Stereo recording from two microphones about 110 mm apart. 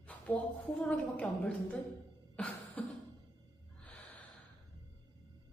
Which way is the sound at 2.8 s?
10° left (ahead or behind).